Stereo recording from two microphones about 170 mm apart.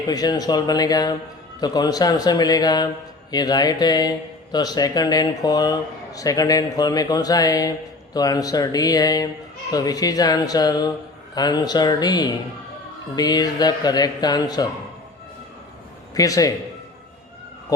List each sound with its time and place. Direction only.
0.1 s a man's voice: 25° left (ahead or behind)
16.1 s a man's voice: 20° left (ahead or behind)
17.7 s speech: 20° left (ahead or behind)